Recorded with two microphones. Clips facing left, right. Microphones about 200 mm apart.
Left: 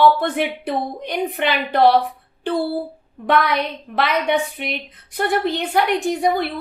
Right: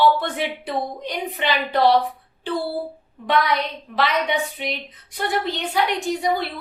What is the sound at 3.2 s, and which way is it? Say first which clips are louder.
A woman's voice: left 2 dB; 55° left (ahead or behind).